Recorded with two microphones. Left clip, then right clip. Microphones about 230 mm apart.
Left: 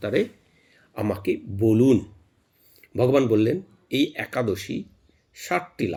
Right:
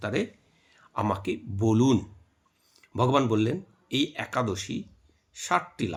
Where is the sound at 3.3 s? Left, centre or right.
Centre.